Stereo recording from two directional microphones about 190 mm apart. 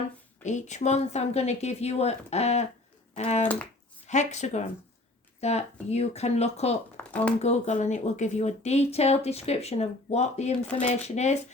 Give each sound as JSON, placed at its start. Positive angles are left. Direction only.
{"t": 0.4, "sound": "speech", "side_deg": 40}
{"t": 6.9, "sound": "a sound", "side_deg": 5}
{"t": 7.4, "sound": "speech", "side_deg": 35}